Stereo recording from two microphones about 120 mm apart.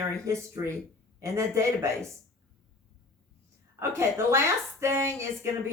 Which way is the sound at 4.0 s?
25° right (ahead or behind).